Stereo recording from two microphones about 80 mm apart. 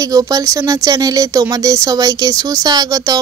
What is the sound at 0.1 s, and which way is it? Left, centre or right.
Speech, right.